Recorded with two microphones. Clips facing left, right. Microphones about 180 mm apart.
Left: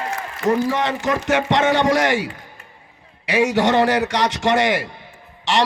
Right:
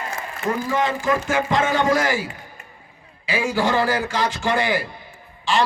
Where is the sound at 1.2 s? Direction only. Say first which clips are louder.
Left 3 dB; 85° left.